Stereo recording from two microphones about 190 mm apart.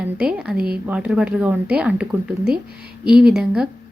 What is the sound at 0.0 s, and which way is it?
A woman's voice, 5° right (ahead or behind).